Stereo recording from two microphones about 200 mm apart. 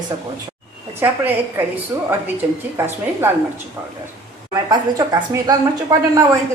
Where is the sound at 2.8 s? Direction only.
10° right (ahead or behind).